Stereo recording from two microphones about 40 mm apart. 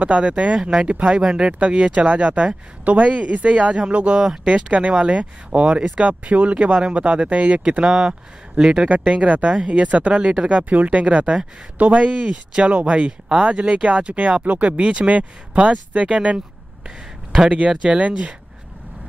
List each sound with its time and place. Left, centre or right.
0.0 s speech: right
0.6 s speech: centre
0.8 s speech: right
8.1 s speech: centre
8.8 s speech: right
10.6 s speech: right
12.2 s speech: right
17.6 s speech: right